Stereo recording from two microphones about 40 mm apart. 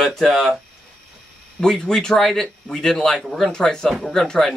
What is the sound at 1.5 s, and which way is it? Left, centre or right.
Speech, centre.